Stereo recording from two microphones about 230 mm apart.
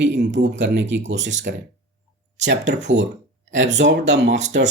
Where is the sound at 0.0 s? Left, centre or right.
Right.